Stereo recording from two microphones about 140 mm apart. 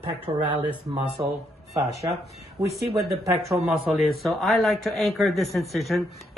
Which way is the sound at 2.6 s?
25° right (ahead or behind).